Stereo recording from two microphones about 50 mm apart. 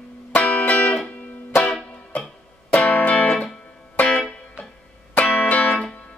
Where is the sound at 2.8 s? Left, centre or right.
Left.